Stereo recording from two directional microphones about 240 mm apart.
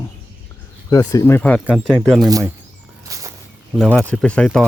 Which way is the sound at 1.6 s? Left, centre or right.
Centre.